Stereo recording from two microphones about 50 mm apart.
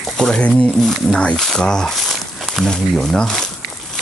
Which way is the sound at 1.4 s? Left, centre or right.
Centre.